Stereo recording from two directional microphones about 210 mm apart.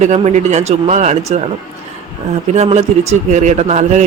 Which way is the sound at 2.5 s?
30° right (ahead or behind).